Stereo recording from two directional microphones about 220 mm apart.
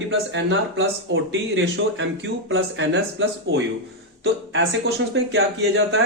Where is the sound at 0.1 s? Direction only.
55° right (ahead or behind).